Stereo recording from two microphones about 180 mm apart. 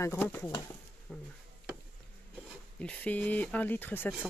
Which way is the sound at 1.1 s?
5° left (ahead or behind).